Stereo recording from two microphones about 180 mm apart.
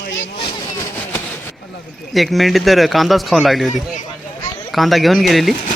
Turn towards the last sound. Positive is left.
turn(degrees=0)  # may be behind; listen again after turning